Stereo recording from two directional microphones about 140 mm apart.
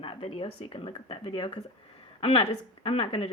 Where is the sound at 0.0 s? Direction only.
40° left (ahead or behind).